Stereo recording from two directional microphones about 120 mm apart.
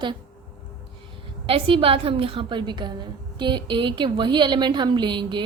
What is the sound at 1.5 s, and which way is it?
A woman's voice, 50° right (ahead or behind).